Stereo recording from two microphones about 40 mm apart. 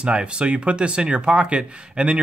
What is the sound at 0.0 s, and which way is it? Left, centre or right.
Speech, right.